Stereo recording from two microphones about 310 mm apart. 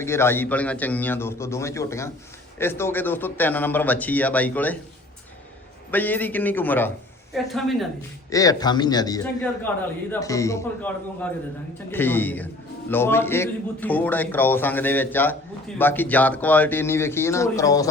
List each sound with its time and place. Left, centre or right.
0.0 s a man's voice: centre
5.9 s a man's voice: centre
8.3 s a man's voice: centre